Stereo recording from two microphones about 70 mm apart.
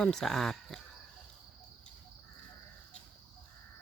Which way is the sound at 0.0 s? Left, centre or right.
Centre.